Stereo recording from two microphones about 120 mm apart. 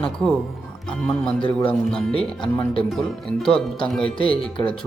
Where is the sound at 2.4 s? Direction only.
45° left (ahead or behind).